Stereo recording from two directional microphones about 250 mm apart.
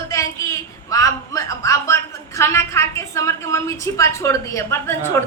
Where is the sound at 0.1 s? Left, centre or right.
Centre.